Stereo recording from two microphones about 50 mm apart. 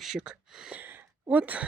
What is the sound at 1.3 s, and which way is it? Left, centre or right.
Speech, right.